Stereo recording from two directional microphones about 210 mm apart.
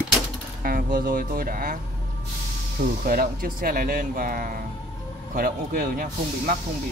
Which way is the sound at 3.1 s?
45° right (ahead or behind).